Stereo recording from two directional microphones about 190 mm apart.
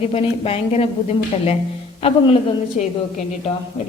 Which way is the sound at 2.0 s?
30° left (ahead or behind).